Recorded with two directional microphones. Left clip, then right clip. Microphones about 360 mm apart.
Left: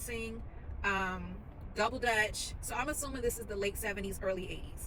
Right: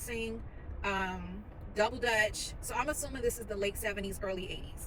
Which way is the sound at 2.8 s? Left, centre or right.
Centre.